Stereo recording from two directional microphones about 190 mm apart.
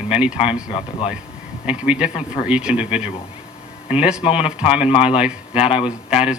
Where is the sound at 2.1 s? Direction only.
35° left (ahead or behind).